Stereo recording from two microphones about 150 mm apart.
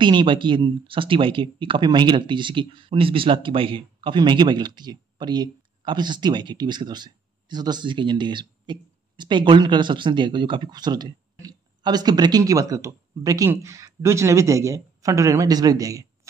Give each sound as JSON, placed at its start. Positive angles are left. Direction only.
{"t": 0.0, "sound": "speech", "side_deg": -30}